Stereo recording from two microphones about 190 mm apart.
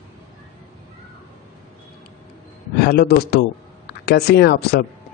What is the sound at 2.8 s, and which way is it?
A man's voice, 55° left (ahead or behind).